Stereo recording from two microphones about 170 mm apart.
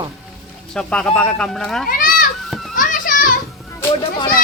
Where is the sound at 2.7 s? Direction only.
50° left (ahead or behind).